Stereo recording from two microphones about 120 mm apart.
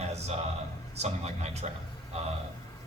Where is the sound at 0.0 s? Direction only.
65° right (ahead or behind).